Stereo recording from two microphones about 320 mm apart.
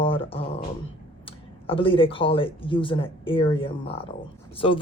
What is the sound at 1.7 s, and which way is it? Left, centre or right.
Speech, centre.